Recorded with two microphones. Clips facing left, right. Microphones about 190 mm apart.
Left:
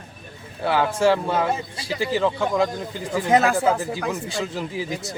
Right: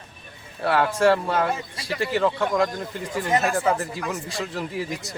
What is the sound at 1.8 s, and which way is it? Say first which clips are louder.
Speech: even; centre (ahead or behind).